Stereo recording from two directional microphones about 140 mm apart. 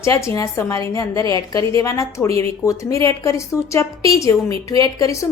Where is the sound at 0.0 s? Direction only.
20° left (ahead or behind).